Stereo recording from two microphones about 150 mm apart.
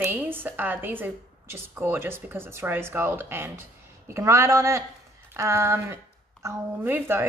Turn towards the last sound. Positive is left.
turn(degrees=-15)  # may be behind; listen again after turning